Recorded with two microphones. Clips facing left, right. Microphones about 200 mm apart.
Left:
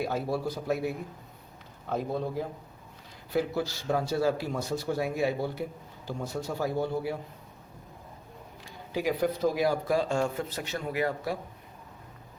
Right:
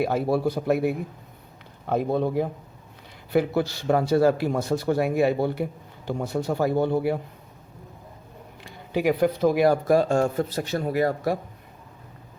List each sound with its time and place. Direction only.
0.0 s speech: 65° right (ahead or behind)
8.6 s speech: 65° right (ahead or behind); by 11.3 s 40° right (ahead or behind)